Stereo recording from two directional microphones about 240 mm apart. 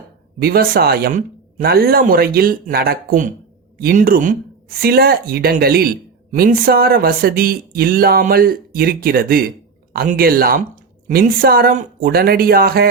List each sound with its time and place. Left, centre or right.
0.3 s speech: right